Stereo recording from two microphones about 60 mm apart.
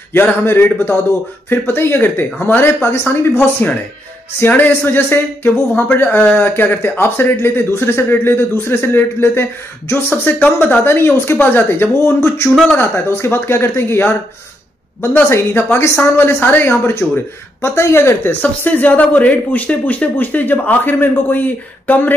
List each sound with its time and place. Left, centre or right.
0.1 s speech: left
4.4 s speech: left
10.9 s speech: left
12.0 s speech: left
12.7 s speech: left
15.2 s speech: left
18.4 s speech: left